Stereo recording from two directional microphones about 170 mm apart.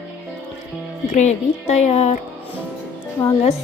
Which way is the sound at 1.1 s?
45° left (ahead or behind).